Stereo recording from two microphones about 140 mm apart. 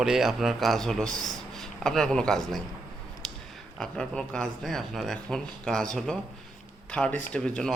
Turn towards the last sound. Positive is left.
turn(degrees=5)  # may be behind; listen again after turning